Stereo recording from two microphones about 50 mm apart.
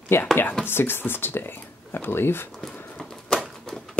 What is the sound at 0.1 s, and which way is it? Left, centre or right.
Speech, left.